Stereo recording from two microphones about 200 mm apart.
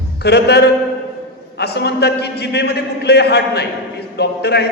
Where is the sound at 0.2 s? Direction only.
55° left (ahead or behind).